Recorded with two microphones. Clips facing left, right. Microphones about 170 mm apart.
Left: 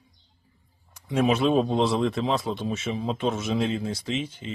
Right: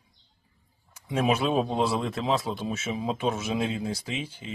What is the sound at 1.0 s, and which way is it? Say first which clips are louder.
A man's voice: left 3 dB; 10° right (ahead or behind).